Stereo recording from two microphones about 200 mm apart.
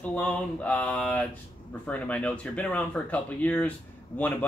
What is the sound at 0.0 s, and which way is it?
Speech, 5° left (ahead or behind).